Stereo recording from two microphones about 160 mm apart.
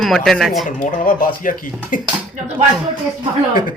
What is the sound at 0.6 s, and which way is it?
Speech, 55° left (ahead or behind).